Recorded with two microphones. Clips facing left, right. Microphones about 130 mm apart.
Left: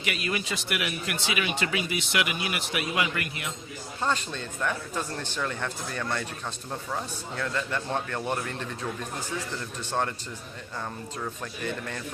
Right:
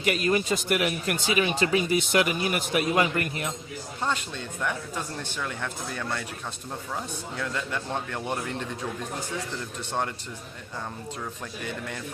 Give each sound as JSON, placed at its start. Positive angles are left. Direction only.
{"t": 0.0, "sound": "speech", "side_deg": -40}
{"t": 4.0, "sound": "speech", "side_deg": -10}